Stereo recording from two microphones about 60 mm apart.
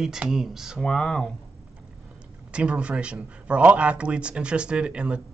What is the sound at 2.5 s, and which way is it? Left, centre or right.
Speech, centre.